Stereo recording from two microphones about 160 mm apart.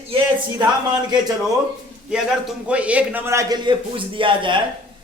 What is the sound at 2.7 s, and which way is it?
A woman's voice, 10° right (ahead or behind).